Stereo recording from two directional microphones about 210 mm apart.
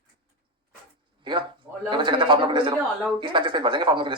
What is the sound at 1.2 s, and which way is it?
Speech, 20° right (ahead or behind).